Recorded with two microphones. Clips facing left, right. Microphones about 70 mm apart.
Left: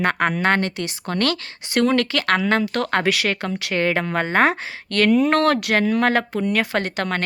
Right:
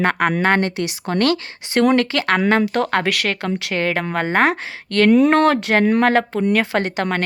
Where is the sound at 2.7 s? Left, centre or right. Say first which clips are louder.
Right 3 dB; centre.